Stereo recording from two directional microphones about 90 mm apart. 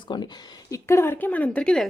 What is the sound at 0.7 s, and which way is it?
Speech, 30° left (ahead or behind).